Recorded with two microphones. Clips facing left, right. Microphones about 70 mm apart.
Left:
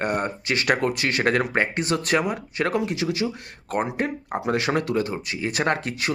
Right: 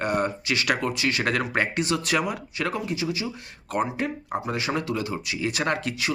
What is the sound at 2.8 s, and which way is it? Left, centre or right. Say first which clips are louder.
Speech: left 4 dB; left.